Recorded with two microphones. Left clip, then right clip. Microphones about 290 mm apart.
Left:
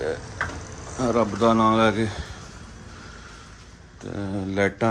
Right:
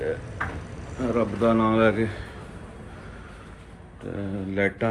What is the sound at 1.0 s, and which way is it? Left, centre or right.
Speech, centre.